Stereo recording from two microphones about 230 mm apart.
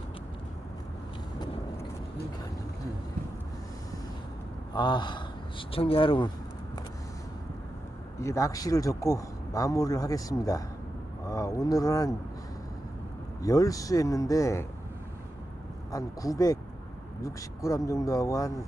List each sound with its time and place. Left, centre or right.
4.7 s speech: centre
8.2 s speech: centre
13.4 s speech: centre
15.9 s speech: centre